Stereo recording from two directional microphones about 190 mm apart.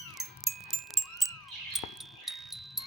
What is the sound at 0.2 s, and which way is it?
Music, centre (ahead or behind).